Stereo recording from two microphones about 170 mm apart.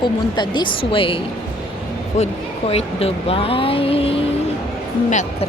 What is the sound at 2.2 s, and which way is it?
Speech, 40° left (ahead or behind).